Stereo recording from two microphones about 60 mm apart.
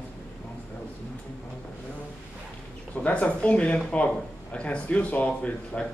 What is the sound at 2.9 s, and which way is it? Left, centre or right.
Speech, left.